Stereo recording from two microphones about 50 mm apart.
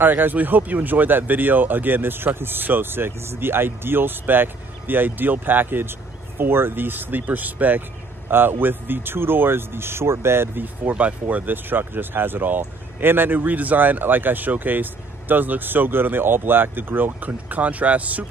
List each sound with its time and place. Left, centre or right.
0.0 s speech: right
8.3 s speech: right
10.6 s speech: right